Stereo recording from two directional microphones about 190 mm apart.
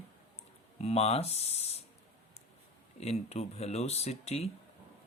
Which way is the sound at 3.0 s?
35° left (ahead or behind).